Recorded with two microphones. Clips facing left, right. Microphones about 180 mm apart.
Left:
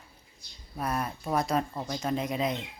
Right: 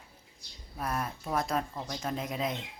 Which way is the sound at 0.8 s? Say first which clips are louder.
Left 3 dB; centre (ahead or behind).